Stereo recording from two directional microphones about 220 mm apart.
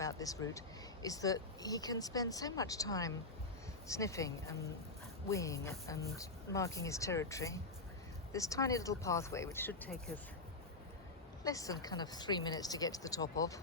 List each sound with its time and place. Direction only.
0.0 s a woman's voice: 15° left (ahead or behind)
11.4 s a woman's voice: 15° left (ahead or behind)